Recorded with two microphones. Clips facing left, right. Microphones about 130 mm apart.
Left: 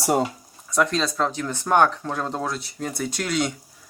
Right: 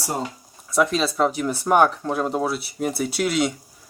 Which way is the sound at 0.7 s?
5° right (ahead or behind).